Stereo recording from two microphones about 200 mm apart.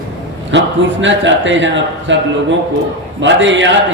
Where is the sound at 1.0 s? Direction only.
70° right (ahead or behind).